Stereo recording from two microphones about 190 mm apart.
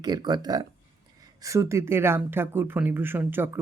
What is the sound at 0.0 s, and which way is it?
Speech, 20° right (ahead or behind).